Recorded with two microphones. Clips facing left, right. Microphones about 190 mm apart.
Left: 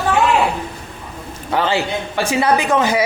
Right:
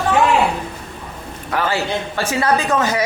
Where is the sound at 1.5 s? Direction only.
20° left (ahead or behind).